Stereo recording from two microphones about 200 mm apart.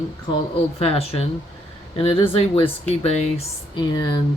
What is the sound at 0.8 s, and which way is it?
Speech, 30° left (ahead or behind).